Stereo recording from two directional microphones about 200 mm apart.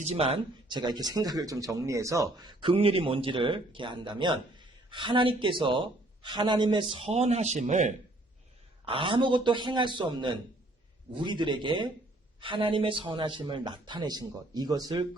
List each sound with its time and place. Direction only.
0.0 s speech: 30° right (ahead or behind)
8.8 s speech: 25° right (ahead or behind)